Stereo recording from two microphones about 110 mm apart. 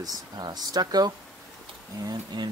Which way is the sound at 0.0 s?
35° right (ahead or behind).